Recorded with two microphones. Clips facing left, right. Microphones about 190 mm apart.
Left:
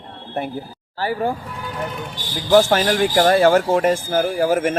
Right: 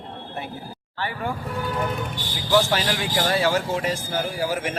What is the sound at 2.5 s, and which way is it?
Speech, 50° left (ahead or behind).